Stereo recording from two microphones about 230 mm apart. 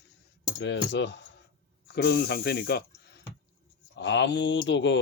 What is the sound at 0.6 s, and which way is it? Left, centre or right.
Speech, left.